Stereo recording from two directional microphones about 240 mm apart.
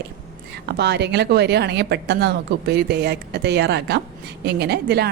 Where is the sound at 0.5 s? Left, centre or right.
Right.